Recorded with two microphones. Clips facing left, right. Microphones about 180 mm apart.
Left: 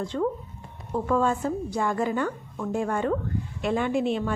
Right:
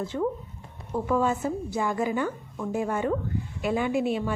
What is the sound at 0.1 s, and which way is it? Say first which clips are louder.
A woman's voice: left 2 dB; 20° right (ahead or behind).